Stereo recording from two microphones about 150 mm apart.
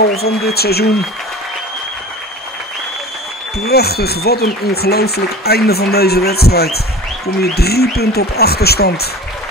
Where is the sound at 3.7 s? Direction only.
90° left.